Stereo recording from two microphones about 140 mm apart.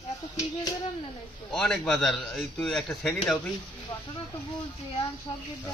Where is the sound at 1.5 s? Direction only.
5° left (ahead or behind).